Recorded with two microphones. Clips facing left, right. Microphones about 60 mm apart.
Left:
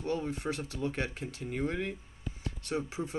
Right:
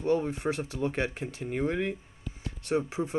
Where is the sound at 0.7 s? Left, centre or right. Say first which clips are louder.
Right 4 dB; right.